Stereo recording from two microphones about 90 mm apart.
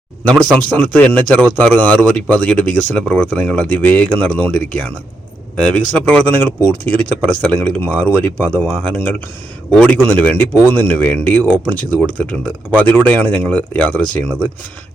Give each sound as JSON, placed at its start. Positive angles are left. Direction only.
{"t": 0.3, "sound": "speech", "side_deg": 10}
{"t": 9.6, "sound": "speech", "side_deg": 10}